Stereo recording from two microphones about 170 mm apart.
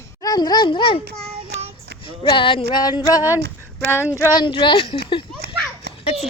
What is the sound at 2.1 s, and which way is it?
Speech, 30° left (ahead or behind).